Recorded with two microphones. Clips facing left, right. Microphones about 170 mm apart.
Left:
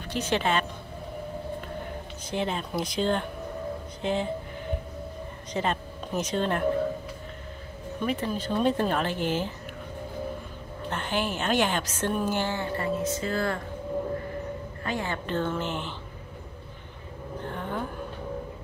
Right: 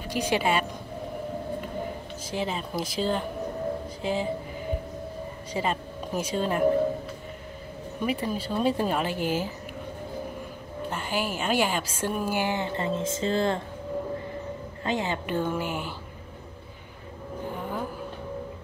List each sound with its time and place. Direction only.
0.0 s speech: 10° right (ahead or behind)
2.3 s speech: 5° right (ahead or behind)
5.5 s speech: 5° right (ahead or behind)
8.0 s speech: 10° right (ahead or behind)
10.9 s speech: 5° right (ahead or behind); by 13.6 s 25° right (ahead or behind)
14.8 s speech: 20° right (ahead or behind)
17.4 s a sound: 10° right (ahead or behind)